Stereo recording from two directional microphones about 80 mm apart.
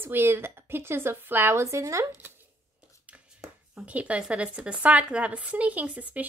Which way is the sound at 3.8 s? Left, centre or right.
Centre.